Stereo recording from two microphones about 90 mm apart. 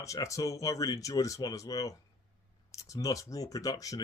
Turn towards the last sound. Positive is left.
turn(degrees=40)  # may be behind; listen again after turning